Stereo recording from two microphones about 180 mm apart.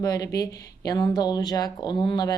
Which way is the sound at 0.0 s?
20° left (ahead or behind).